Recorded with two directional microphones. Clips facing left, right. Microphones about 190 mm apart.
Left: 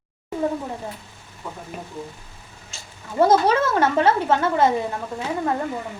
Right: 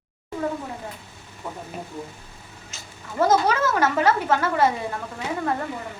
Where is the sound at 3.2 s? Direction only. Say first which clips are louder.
Left 3 dB; 30° left (ahead or behind).